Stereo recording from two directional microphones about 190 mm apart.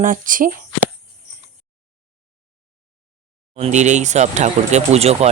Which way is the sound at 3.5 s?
35° right (ahead or behind).